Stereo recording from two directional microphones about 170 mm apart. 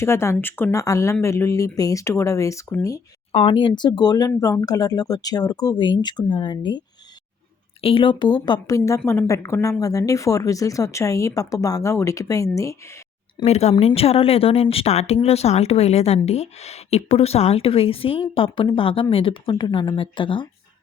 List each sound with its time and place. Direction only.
0.0 s speech: 15° left (ahead or behind)
3.3 s speech: 30° left (ahead or behind)
13.4 s a woman's voice: 40° left (ahead or behind)